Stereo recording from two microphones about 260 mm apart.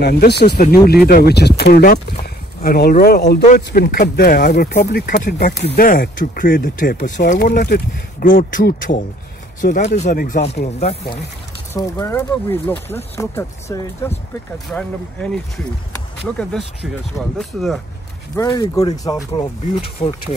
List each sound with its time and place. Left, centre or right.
0.0 s speech: left
11.7 s speech: centre
18.3 s speech: centre
20.0 s speech: left